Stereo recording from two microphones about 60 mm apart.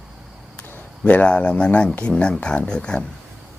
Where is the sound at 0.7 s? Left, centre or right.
Left.